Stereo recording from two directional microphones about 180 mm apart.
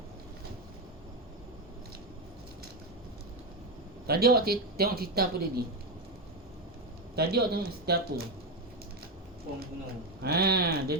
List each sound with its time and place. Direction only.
4.0 s speech: 60° right (ahead or behind)
7.2 s speech: 60° right (ahead or behind)
10.2 s speech: 60° right (ahead or behind)